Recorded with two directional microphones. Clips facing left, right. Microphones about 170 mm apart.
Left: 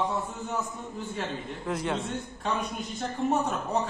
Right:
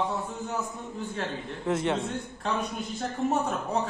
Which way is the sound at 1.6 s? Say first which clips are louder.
Right 4 dB; 25° right (ahead or behind).